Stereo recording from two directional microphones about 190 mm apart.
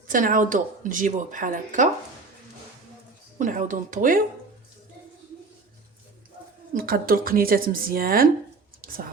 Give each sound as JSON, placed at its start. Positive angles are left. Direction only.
{"t": 0.1, "sound": "speech", "side_deg": -45}
{"t": 3.3, "sound": "speech", "side_deg": -45}
{"t": 6.7, "sound": "speech", "side_deg": -50}
{"t": 8.8, "sound": "whispering", "side_deg": -50}